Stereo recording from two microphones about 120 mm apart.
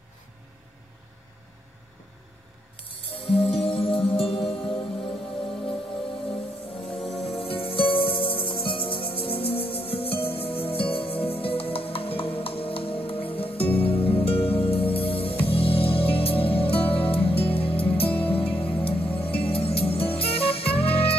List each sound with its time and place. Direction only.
2.9 s music: 50° left (ahead or behind)
6.8 s music: centre (ahead or behind)
7.2 s music: 50° left (ahead or behind)